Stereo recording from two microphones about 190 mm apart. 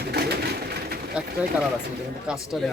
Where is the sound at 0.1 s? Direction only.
55° right (ahead or behind).